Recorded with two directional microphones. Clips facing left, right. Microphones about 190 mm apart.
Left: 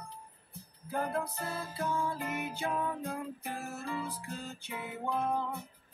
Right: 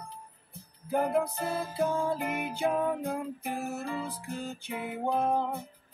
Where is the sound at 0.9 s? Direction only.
20° right (ahead or behind).